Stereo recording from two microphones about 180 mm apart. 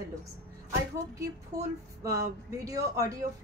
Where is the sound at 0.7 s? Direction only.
15° right (ahead or behind).